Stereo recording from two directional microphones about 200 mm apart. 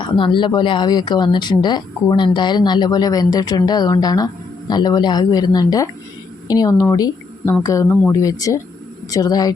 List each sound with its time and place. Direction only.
0.0 s speech: 25° left (ahead or behind)